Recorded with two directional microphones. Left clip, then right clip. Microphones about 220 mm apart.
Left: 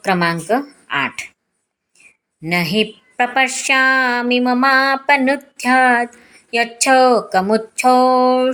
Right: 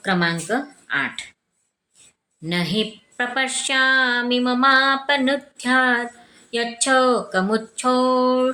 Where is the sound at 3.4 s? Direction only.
5° left (ahead or behind).